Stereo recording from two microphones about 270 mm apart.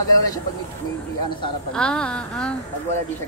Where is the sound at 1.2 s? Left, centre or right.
Centre.